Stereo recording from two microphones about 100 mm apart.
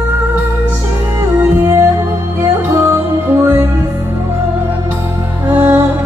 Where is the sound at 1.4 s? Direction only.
30° right (ahead or behind).